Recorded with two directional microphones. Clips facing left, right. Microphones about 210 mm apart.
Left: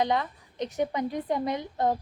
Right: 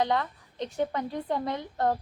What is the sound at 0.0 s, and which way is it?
A woman's voice, 15° left (ahead or behind).